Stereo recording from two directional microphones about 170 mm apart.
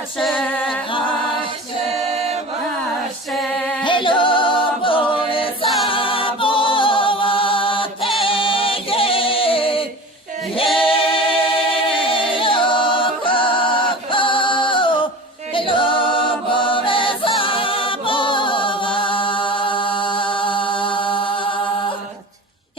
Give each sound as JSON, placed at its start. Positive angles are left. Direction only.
{"t": 0.2, "sound": "a capella", "side_deg": 5}
{"t": 0.9, "sound": "music", "side_deg": 30}
{"t": 3.3, "sound": "female singing", "side_deg": 5}
{"t": 3.8, "sound": "a capella", "side_deg": 30}
{"t": 5.6, "sound": "choir", "side_deg": 0}
{"t": 5.9, "sound": "a capella", "side_deg": 30}
{"t": 15.5, "sound": "chant", "side_deg": 30}